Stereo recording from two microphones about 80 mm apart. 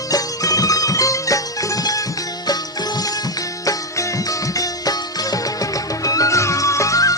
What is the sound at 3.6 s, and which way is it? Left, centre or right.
Music, left.